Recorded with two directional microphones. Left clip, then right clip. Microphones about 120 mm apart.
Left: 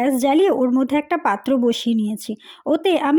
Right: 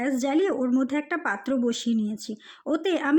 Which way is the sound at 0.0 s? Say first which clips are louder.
Left 8 dB; 40° left (ahead or behind).